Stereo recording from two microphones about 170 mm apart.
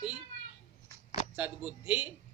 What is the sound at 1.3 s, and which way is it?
Speech, 10° right (ahead or behind).